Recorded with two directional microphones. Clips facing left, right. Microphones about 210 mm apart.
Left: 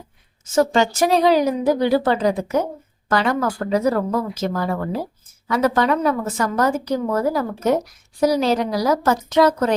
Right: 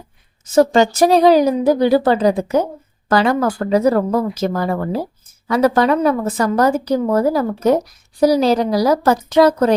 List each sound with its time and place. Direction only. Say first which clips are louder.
0.4 s a woman's voice: right 5 dB; 35° right (ahead or behind)